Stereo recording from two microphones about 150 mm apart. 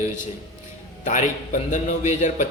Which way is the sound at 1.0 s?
55° left (ahead or behind).